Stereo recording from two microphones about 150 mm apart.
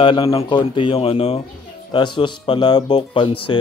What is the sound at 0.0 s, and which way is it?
Speech, 35° left (ahead or behind).